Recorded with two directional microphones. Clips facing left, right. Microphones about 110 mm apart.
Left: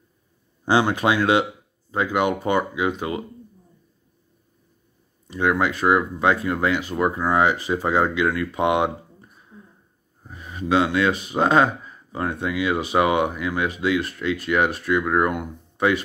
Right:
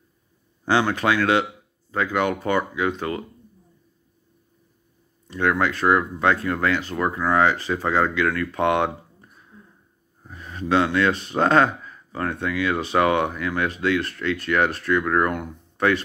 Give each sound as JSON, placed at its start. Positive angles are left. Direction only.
{"t": 0.7, "sound": "speech", "side_deg": 15}
{"t": 5.3, "sound": "speech", "side_deg": 10}